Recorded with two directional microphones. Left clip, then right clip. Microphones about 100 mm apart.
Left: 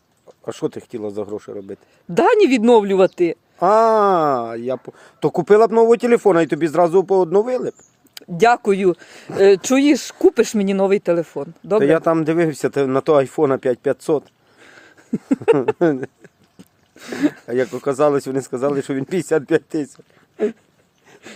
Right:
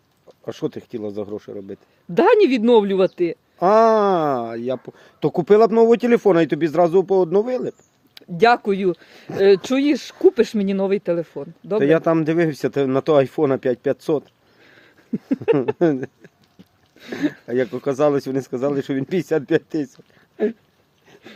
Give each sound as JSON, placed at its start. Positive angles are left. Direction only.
{"t": 0.4, "sound": "speech", "side_deg": -10}
{"t": 2.1, "sound": "speech", "side_deg": 60}
{"t": 3.6, "sound": "speech", "side_deg": -15}
{"t": 4.9, "sound": "speech", "side_deg": -5}
{"t": 8.1, "sound": "speech", "side_deg": 55}
{"t": 11.8, "sound": "speech", "side_deg": -15}
{"t": 14.6, "sound": "a sound", "side_deg": 55}
{"t": 15.8, "sound": "speech", "side_deg": -20}
{"t": 16.6, "sound": "a sound", "side_deg": 65}
{"t": 17.4, "sound": "speech", "side_deg": -15}